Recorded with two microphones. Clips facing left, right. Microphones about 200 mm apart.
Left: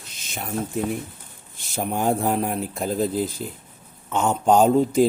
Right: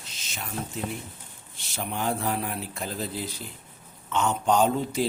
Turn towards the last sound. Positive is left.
turn(degrees=45)  # may be behind; listen again after turning